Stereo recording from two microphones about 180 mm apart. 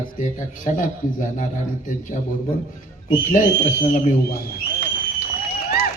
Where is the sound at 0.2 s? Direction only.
45° left (ahead or behind).